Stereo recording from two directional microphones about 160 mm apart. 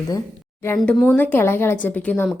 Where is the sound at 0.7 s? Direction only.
5° left (ahead or behind).